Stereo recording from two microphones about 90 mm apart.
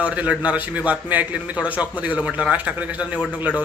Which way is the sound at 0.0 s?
15° right (ahead or behind).